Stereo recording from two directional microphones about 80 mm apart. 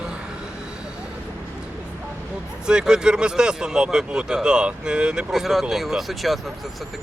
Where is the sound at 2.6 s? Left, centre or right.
Centre.